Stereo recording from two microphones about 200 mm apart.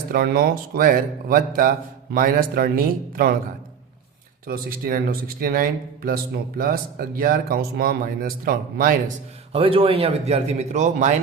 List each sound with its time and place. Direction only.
0.1 s speech: 45° right (ahead or behind)
4.4 s speech: 50° right (ahead or behind)
9.5 s a man's voice: 30° right (ahead or behind)